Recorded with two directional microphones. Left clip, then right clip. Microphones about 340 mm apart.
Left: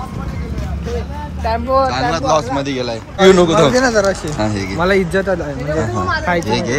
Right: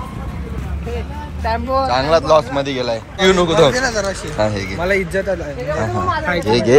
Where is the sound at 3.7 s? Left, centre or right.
Left.